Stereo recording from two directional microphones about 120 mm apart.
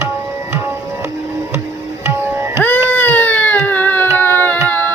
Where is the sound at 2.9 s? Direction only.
15° left (ahead or behind).